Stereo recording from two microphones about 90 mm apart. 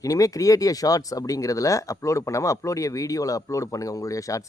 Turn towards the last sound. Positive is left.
turn(degrees=40)  # may be behind; listen again after turning